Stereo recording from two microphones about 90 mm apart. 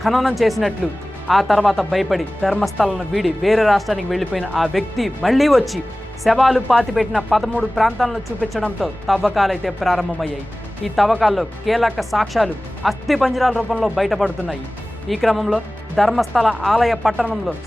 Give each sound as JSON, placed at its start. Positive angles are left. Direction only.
{"t": 0.0, "sound": "speech", "side_deg": 0}